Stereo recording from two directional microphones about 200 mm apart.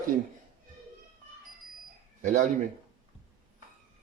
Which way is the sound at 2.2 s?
40° right (ahead or behind).